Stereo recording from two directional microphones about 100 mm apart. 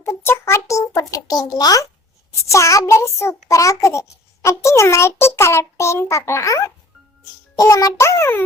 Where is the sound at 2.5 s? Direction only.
30° left (ahead or behind).